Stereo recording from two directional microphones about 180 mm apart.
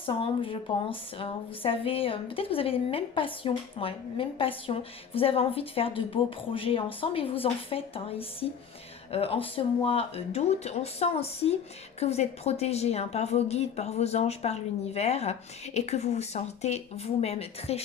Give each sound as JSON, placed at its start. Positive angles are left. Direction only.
{"t": 0.0, "sound": "speech", "side_deg": 30}